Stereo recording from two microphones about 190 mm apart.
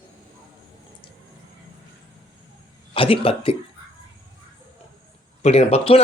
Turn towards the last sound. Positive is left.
turn(degrees=30)  # may be behind; listen again after turning